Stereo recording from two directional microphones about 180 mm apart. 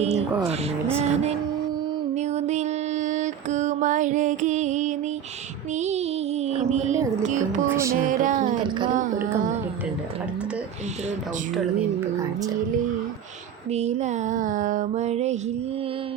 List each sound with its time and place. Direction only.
0.9 s a sound: 35° right (ahead or behind)
2.1 s mantra: 40° right (ahead or behind)
5.7 s child singing: 40° right (ahead or behind)
7.2 s music: 45° right (ahead or behind)
7.7 s music: 15° right (ahead or behind)
8.0 s music: 45° right (ahead or behind)
13.7 s a sound: 35° right (ahead or behind)